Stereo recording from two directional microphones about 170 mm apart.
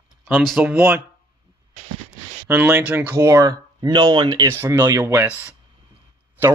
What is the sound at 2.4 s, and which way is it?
Speech, 10° right (ahead or behind).